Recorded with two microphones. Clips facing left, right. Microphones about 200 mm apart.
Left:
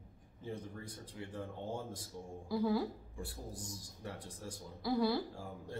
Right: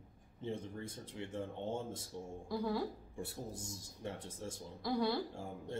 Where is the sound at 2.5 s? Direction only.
Centre (ahead or behind).